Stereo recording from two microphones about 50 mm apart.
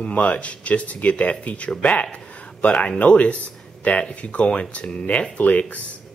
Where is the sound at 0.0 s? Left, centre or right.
Left.